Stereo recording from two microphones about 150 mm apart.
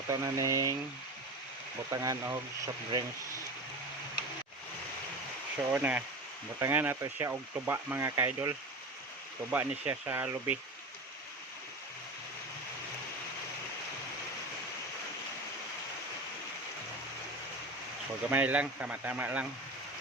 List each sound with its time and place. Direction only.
0.1 s speech: 20° right (ahead or behind)
1.9 s speech: 25° right (ahead or behind)
5.7 s speech: 10° right (ahead or behind)
18.3 s speech: 10° right (ahead or behind)